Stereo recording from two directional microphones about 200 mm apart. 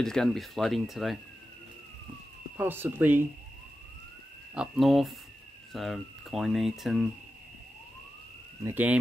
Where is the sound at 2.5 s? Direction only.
10° right (ahead or behind).